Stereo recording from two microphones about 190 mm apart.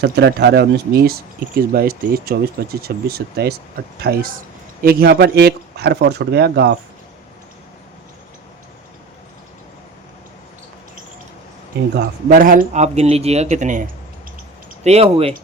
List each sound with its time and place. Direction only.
0.0 s speech: 60° right (ahead or behind)
12.3 s speech: 45° right (ahead or behind)
14.8 s speech: 35° right (ahead or behind)